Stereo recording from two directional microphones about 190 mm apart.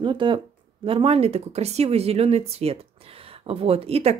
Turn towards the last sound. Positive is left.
turn(degrees=-30)  # may be behind; listen again after turning